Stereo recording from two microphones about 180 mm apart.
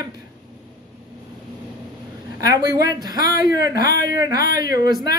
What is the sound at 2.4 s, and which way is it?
Speech, 20° right (ahead or behind).